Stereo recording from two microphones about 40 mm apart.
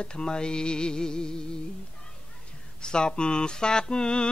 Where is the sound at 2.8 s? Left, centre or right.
Left.